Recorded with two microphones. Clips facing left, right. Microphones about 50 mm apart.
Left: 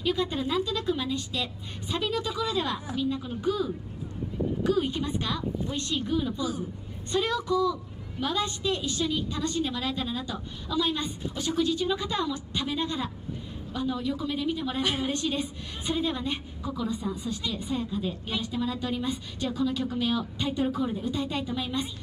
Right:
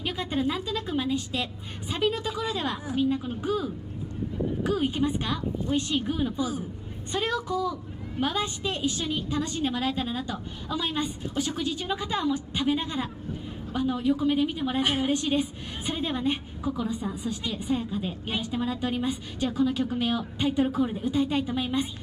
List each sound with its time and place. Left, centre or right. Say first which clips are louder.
0.0 s a woman's voice: even; centre